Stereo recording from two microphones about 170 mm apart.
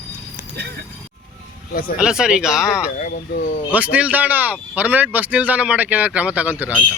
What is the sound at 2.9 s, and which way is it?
Speech, 50° left (ahead or behind).